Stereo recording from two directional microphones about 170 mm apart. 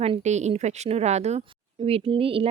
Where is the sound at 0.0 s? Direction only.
40° right (ahead or behind).